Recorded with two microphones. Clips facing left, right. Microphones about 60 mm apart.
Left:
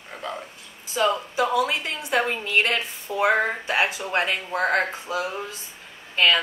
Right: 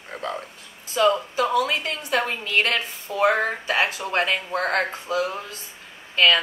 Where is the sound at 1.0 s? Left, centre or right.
Centre.